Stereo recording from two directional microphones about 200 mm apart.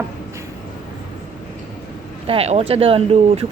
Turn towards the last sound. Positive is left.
turn(degrees=-30)  # may be behind; listen again after turning